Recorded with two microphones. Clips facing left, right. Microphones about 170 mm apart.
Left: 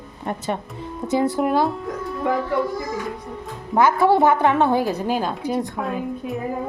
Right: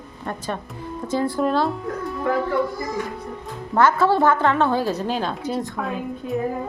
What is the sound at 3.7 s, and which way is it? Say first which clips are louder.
A woman's voice: left 1 dB; 15° left (ahead or behind).